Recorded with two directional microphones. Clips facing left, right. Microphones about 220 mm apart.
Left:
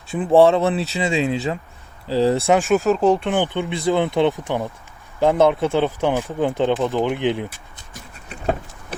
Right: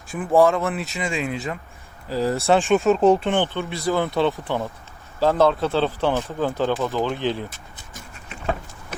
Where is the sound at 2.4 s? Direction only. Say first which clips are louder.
Left 1 dB; 15° left (ahead or behind).